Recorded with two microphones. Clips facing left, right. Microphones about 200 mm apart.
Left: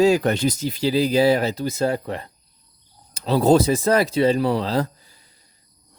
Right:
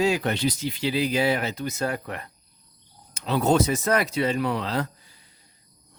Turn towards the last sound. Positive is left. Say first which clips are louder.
# left 5 dB
turn(degrees=35)  # may be behind; listen again after turning